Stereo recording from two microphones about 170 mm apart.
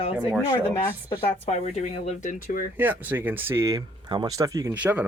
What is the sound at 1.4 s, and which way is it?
Speech, 40° left (ahead or behind).